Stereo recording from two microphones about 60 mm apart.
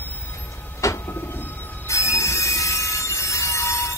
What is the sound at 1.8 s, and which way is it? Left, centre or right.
Train wheels squealing, left.